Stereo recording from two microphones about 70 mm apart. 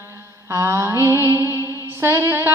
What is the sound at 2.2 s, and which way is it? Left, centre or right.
Music, right.